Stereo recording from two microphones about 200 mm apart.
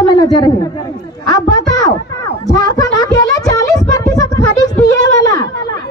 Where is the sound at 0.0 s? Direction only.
20° left (ahead or behind).